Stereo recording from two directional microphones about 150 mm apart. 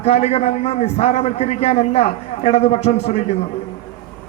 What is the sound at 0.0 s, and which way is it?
A man's voice, 45° left (ahead or behind).